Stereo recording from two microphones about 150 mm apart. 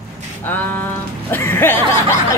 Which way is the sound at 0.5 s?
10° left (ahead or behind).